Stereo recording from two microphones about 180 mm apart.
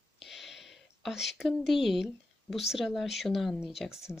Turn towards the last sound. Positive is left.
turn(degrees=0)  # may be behind; listen again after turning